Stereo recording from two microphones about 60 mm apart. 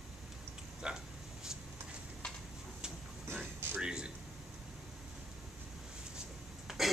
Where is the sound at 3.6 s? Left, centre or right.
Right.